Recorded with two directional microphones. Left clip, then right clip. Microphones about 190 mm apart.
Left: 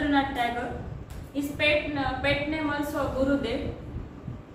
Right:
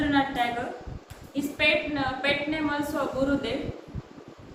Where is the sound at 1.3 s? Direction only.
25° right (ahead or behind).